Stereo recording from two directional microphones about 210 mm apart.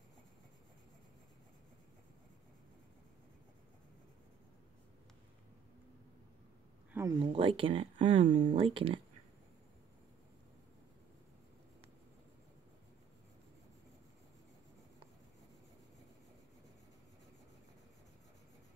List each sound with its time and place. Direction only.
6.9 s speech: 10° right (ahead or behind)
7.3 s speech: 25° right (ahead or behind)